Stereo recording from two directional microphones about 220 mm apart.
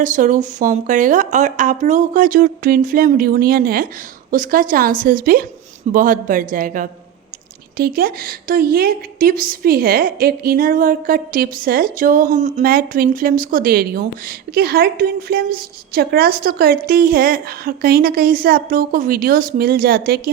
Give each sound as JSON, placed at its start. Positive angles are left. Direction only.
{"t": 0.0, "sound": "a woman's voice", "side_deg": -35}